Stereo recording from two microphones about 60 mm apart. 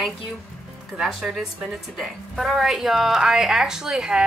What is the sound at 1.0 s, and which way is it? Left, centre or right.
Speech, centre.